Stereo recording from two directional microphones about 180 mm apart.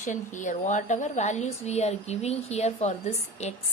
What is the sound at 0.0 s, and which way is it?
Speech, 45° left (ahead or behind).